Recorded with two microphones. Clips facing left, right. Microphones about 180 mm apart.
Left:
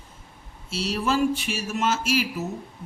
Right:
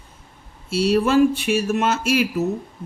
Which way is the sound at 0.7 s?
60° right (ahead or behind).